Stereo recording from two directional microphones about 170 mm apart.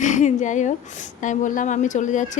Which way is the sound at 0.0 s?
45° left (ahead or behind).